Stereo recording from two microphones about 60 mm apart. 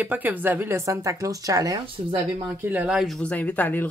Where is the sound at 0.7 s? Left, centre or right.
Right.